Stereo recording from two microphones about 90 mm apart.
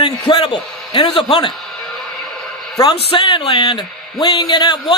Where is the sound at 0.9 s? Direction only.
85° left.